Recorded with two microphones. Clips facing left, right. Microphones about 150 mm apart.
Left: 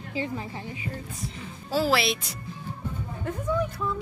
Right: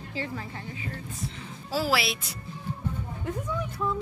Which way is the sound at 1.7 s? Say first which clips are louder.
Left 3 dB; 5° right (ahead or behind).